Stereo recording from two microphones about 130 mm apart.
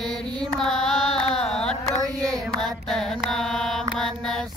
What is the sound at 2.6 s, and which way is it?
Mantra, 5° left (ahead or behind).